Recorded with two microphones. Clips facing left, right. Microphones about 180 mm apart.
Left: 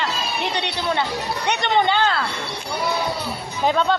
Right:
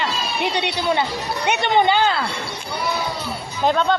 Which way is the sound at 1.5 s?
5° right (ahead or behind).